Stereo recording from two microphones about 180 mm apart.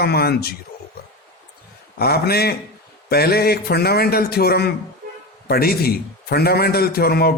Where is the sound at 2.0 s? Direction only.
60° left (ahead or behind).